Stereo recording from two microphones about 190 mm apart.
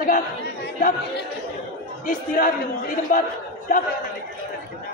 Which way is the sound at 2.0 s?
45° left (ahead or behind).